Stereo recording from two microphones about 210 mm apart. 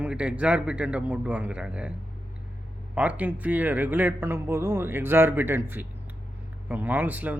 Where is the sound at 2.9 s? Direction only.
5° right (ahead or behind).